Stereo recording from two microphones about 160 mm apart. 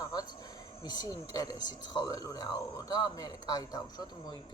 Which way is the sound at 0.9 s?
25° left (ahead or behind).